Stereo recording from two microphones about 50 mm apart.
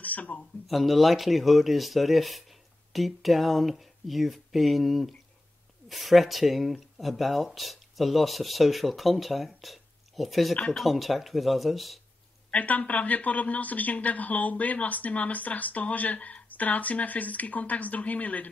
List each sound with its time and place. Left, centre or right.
0.0 s a sound: left
0.7 s speech: centre
12.4 s a man's voice: left